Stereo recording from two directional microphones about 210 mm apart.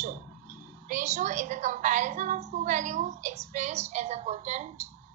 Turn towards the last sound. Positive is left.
turn(degrees=-35)  # may be behind; listen again after turning